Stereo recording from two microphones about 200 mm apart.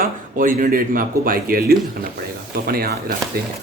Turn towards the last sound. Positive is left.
turn(degrees=-50)  # may be behind; listen again after turning